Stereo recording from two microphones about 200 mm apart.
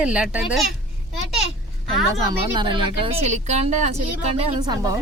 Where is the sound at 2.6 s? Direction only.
25° right (ahead or behind).